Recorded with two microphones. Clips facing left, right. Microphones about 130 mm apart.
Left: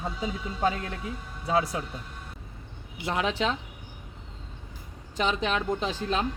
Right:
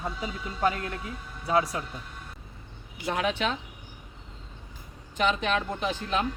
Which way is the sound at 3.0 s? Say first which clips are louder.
Even; 25° left (ahead or behind).